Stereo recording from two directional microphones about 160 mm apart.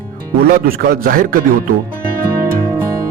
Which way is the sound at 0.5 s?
65° right (ahead or behind).